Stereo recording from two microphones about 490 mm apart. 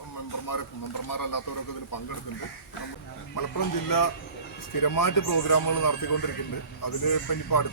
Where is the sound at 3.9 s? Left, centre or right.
Left.